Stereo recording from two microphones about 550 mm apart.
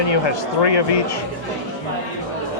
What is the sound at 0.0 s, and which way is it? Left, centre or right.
Speech, left.